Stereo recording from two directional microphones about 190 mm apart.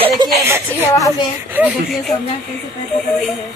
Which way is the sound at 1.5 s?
5° right (ahead or behind).